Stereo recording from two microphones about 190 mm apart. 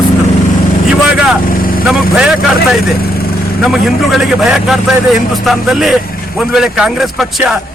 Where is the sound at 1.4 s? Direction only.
50° left (ahead or behind).